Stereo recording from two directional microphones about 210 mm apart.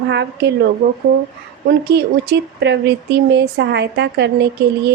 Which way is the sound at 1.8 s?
50° right (ahead or behind).